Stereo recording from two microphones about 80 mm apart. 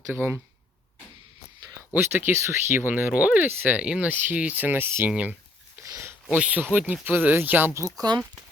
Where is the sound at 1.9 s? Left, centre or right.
Right.